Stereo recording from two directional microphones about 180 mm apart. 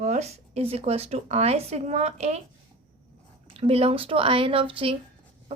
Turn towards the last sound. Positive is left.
turn(degrees=-30)  # may be behind; listen again after turning